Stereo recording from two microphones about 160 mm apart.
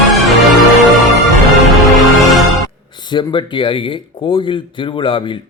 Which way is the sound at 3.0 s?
30° left (ahead or behind).